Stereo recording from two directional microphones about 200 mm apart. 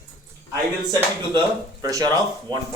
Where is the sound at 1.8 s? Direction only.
20° right (ahead or behind).